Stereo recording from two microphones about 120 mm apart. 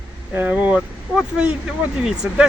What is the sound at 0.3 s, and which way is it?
Speech, 15° right (ahead or behind).